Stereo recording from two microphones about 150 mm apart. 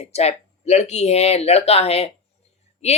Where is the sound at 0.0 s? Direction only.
45° left (ahead or behind).